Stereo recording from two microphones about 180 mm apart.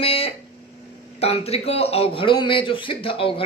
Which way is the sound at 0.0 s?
30° left (ahead or behind).